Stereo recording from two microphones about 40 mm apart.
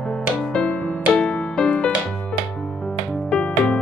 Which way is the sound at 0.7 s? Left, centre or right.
Left.